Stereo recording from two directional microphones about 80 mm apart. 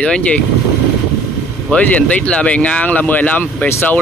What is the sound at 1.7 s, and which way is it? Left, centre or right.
Speech, centre.